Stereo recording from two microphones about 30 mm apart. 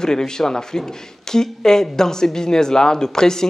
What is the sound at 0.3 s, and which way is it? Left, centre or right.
Speech, left.